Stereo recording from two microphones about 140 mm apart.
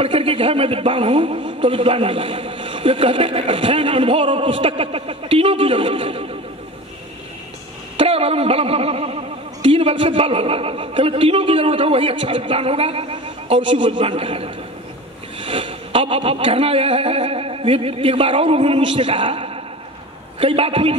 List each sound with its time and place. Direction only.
0.0 s speech: 40° right (ahead or behind)
8.0 s speech: 45° right (ahead or behind)